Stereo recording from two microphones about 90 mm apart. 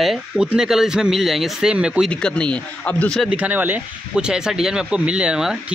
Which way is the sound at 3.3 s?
15° right (ahead or behind).